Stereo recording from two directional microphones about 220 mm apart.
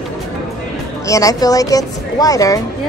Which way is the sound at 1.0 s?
15° left (ahead or behind).